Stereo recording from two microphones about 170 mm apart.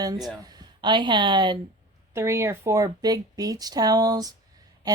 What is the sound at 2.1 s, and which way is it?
Speech, 15° right (ahead or behind).